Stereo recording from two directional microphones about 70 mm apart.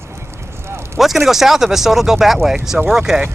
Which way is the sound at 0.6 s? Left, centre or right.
Right.